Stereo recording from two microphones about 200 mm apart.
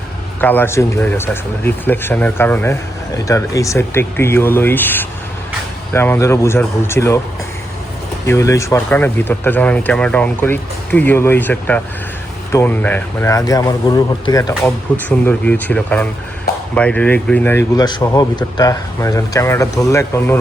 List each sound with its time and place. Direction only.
0.4 s a man's voice: 10° left (ahead or behind)
8.3 s a man's voice: 15° left (ahead or behind)